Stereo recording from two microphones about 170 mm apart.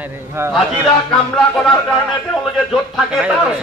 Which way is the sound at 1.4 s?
5° left (ahead or behind).